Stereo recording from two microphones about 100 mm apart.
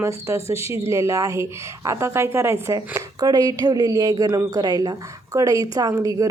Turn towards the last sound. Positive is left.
turn(degrees=-35)  # may be behind; listen again after turning